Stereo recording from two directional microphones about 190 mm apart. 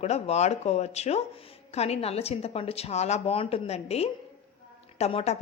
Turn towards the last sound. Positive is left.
turn(degrees=35)  # may be behind; listen again after turning